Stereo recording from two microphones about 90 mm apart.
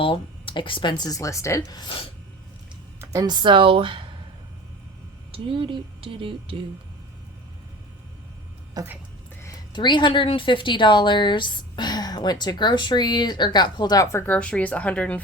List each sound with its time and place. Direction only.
0.0 s speech: 75° left (ahead or behind); by 1.2 s 50° left (ahead or behind)
1.2 s speech: 35° left (ahead or behind)
3.0 s music: 35° right (ahead or behind)
3.2 s speech: 55° right (ahead or behind); by 4.0 s 75° right (ahead or behind)
5.3 s a woman's voice: 80° right
8.8 s a woman's voice: 40° right (ahead or behind)
9.7 s a woman's voice: 55° left (ahead or behind)
14.0 s speech: 30° left (ahead or behind)
14.3 s speech: 10° left (ahead or behind)